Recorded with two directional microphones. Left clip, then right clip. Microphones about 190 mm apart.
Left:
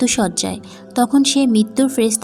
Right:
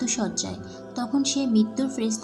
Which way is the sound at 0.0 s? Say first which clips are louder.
Left 10 dB; 45° left (ahead or behind).